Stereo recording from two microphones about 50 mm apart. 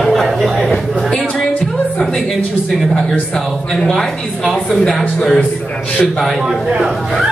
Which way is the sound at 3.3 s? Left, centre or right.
Centre.